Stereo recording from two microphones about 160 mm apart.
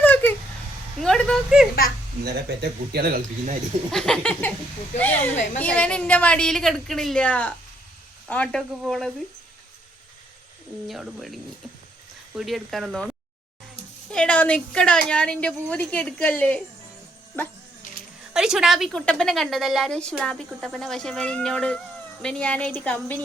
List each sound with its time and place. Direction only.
0.0 s a sound: 10° left (ahead or behind)
0.9 s vehicle: 5° left (ahead or behind)
2.2 s a man's voice: 85° right; by 3.5 s 60° right (ahead or behind)
3.9 s a woman's voice: 5° left (ahead or behind)
10.8 s a woman's voice: centre (ahead or behind)
18.3 s a woman's voice: 5° right (ahead or behind)